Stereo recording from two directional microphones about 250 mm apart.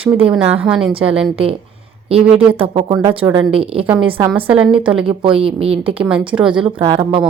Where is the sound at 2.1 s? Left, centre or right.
Right.